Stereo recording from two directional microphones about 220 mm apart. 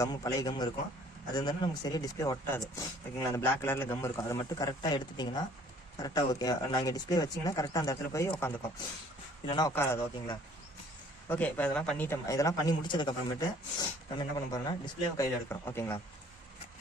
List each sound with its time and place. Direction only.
0.0 s speech: 15° left (ahead or behind)
11.2 s speech: 5° left (ahead or behind)